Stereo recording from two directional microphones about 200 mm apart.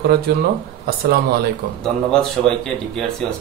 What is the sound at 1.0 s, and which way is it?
Speech, 50° right (ahead or behind).